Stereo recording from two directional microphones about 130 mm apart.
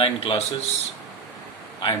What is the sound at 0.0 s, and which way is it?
Speech, 45° left (ahead or behind).